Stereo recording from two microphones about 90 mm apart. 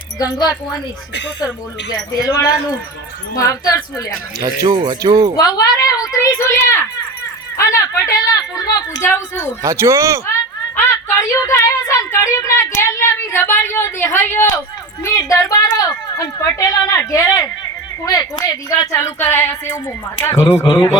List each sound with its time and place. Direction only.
0.2 s speech: 50° left (ahead or behind)
1.9 s a woman's voice: 45° left (ahead or behind)
4.4 s speech: 50° right (ahead or behind)
5.4 s a woman's voice: 45° left (ahead or behind)
9.0 s a woman's voice: 25° left (ahead or behind)
9.6 s speech: 30° right (ahead or behind)
10.8 s a woman's voice: 30° left (ahead or behind)
18.2 s speech: 45° left (ahead or behind)
18.9 s a woman's voice: 30° left (ahead or behind)